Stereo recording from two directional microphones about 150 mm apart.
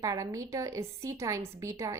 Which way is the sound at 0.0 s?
20° right (ahead or behind).